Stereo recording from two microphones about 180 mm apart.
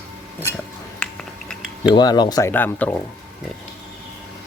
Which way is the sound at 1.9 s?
25° left (ahead or behind).